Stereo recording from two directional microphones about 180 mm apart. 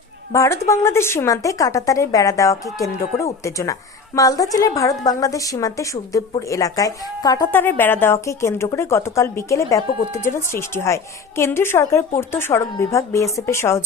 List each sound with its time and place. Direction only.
0.3 s a woman's voice: 15° left (ahead or behind)